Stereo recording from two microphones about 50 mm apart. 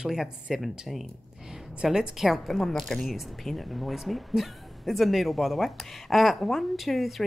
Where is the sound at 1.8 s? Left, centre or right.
Centre.